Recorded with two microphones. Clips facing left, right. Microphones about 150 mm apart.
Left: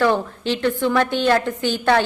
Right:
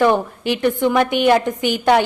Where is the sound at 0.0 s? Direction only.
15° right (ahead or behind).